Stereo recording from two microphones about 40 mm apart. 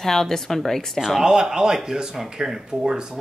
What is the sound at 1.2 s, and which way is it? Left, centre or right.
Speech, centre.